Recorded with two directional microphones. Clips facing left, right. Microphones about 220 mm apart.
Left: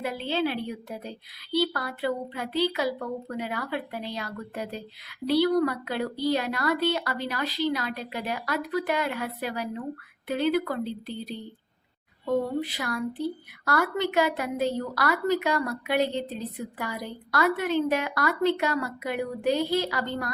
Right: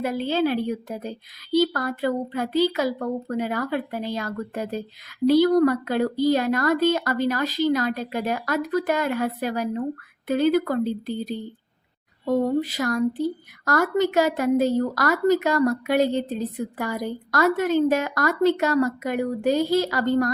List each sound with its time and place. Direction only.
0.0 s speech: 45° right (ahead or behind)